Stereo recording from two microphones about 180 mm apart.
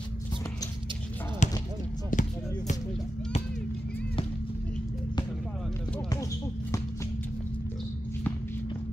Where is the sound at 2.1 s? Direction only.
45° left (ahead or behind).